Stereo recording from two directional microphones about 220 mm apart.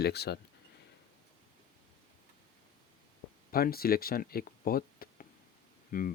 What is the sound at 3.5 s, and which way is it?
Speech, 40° left (ahead or behind).